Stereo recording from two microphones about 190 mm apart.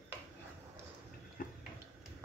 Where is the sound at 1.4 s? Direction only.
45° left (ahead or behind).